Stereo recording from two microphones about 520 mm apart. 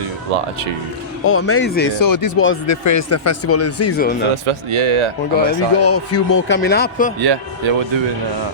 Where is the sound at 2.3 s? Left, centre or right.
Left.